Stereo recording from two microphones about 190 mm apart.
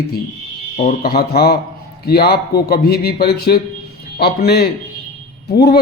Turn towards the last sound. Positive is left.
turn(degrees=60)  # may be behind; listen again after turning